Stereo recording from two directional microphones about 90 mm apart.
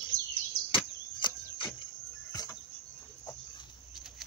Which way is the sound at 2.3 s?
40° left (ahead or behind).